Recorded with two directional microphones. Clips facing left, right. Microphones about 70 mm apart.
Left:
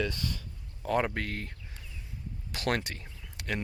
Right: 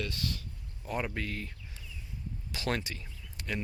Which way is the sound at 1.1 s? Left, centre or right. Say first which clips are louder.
Left 2 dB; left.